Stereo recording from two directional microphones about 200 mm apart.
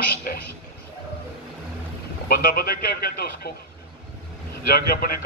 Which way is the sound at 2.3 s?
50° left (ahead or behind).